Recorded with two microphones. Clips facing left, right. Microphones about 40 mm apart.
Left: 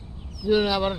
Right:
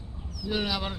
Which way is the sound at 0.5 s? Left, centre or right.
Centre.